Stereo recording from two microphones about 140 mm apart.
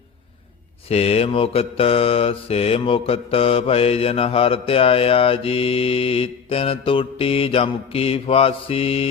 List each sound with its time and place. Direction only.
0.9 s mantra: 45° left (ahead or behind)